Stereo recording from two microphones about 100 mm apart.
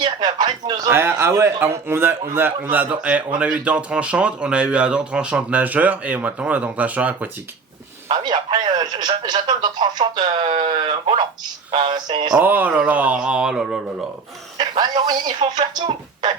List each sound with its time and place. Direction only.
0.0 s speech: 45° right (ahead or behind)
0.9 s a man's voice: 25° right (ahead or behind)
8.1 s speech: 50° right (ahead or behind)
12.4 s a man's voice: 20° right (ahead or behind)
14.6 s speech: 50° right (ahead or behind)